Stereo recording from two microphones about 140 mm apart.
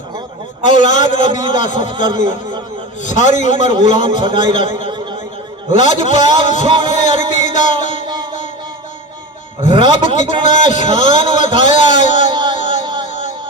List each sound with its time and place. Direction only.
0.6 s a man's voice: 60° left (ahead or behind)
6.9 s music: 60° left (ahead or behind)
9.6 s a man's voice: 60° left (ahead or behind)
12.3 s a sound: 35° right (ahead or behind)
12.5 s music: 60° left (ahead or behind)
12.8 s a sound: 30° right (ahead or behind)